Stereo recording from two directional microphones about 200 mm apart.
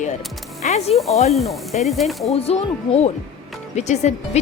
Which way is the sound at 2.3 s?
30° left (ahead or behind).